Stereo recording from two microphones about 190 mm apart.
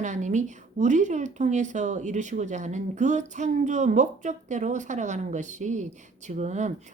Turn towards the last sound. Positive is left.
turn(degrees=-40)  # may be behind; listen again after turning